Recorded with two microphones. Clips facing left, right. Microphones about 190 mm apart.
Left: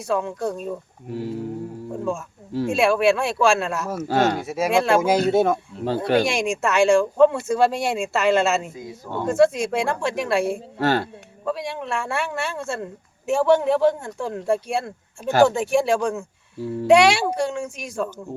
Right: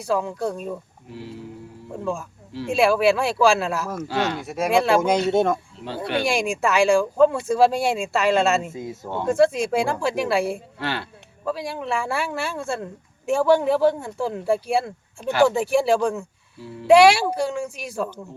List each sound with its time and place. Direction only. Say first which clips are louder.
0.0 s speech: even; centre (ahead or behind)
1.1 s speech: left 8 dB; 45° left (ahead or behind)
2.5 s speech: left 4 dB; 45° left (ahead or behind)
2.7 s speech: right 1 dB; centre (ahead or behind)
4.1 s speech: left 5 dB; 45° left (ahead or behind)
4.4 s speech: even; centre (ahead or behind)
8.7 s speech: right 3 dB; 25° right (ahead or behind)
9.2 s speech: left 1 dB; centre (ahead or behind)
10.8 s speech: left 8 dB; 45° left (ahead or behind)
11.4 s speech: even; centre (ahead or behind)